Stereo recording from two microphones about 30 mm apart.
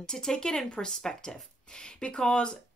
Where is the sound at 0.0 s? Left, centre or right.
Centre.